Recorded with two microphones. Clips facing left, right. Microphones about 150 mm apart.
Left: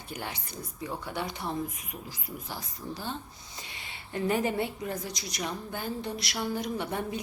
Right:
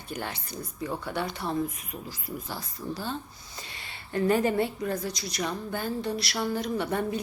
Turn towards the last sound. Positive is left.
turn(degrees=15)  # may be behind; listen again after turning